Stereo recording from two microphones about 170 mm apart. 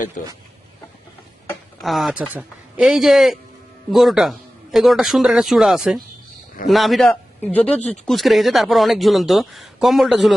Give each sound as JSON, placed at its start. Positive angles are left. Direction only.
{"t": 0.2, "sound": "speech", "side_deg": 50}
{"t": 1.8, "sound": "speech", "side_deg": 0}